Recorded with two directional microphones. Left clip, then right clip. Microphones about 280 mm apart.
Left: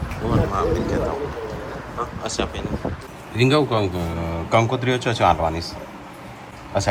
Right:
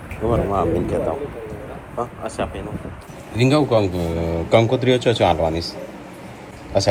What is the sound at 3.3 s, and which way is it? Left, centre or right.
Speech, centre.